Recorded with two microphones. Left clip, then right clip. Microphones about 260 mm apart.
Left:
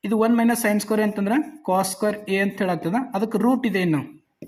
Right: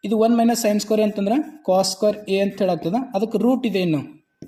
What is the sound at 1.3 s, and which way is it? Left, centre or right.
Speech, centre.